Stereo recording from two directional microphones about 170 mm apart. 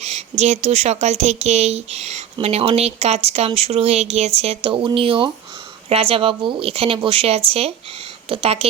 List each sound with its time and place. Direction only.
0.0 s speech: 40° right (ahead or behind)